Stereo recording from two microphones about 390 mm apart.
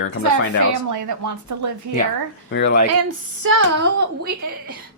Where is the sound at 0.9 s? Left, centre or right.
Right.